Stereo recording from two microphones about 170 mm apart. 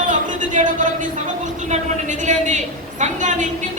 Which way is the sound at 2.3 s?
45° right (ahead or behind).